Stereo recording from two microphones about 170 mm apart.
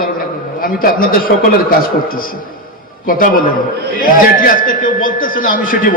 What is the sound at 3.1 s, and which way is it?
A man's voice, 55° left (ahead or behind).